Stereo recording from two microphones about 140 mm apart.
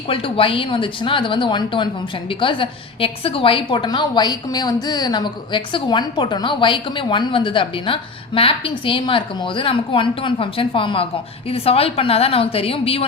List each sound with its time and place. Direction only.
0.1 s a woman's voice: 40° left (ahead or behind)